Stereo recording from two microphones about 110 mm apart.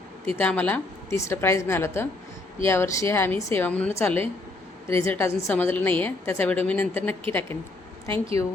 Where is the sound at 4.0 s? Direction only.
20° left (ahead or behind).